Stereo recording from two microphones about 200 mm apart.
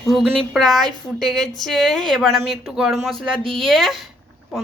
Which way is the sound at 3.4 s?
25° right (ahead or behind).